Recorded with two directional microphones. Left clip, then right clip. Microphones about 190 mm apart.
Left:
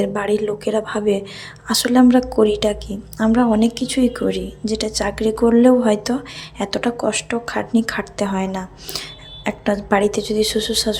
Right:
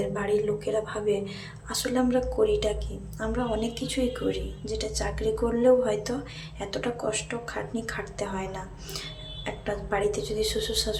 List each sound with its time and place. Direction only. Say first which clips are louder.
0.0 s speech: left 7 dB; 50° left (ahead or behind)